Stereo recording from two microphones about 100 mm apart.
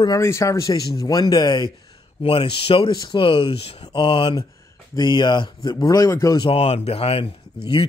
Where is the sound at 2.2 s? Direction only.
70° left (ahead or behind).